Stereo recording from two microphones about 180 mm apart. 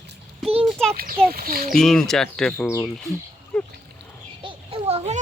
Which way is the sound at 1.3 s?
55° right (ahead or behind).